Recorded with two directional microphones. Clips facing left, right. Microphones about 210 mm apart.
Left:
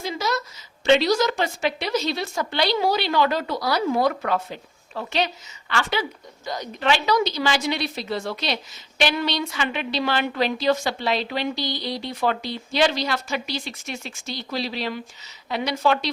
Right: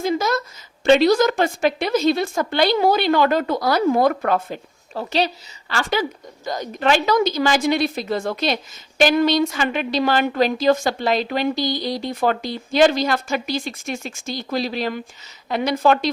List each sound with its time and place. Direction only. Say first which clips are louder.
0.0 s a woman's voice: right 6 dB; 50° right (ahead or behind)